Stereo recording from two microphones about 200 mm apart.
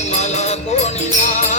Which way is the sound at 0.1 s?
35° left (ahead or behind).